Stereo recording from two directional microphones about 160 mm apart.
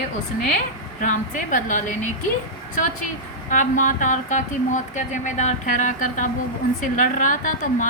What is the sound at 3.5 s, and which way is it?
A woman's voice, 55° left (ahead or behind).